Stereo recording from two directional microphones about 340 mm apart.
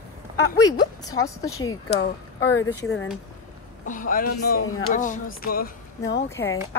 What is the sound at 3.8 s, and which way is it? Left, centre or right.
Speech, left.